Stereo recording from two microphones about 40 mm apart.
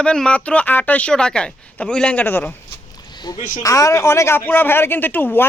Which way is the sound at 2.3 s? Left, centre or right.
Left.